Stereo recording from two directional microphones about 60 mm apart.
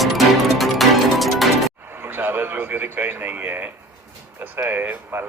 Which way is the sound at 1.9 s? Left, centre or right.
Right.